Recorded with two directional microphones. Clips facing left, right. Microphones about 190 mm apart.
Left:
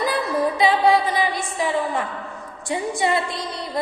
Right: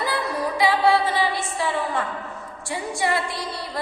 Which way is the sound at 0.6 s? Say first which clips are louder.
Even; 20° left (ahead or behind).